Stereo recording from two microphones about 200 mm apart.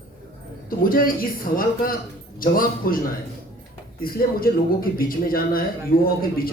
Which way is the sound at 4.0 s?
45° left (ahead or behind).